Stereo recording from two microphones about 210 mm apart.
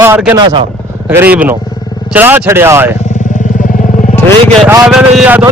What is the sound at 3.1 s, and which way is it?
Motorcycle, 35° left (ahead or behind).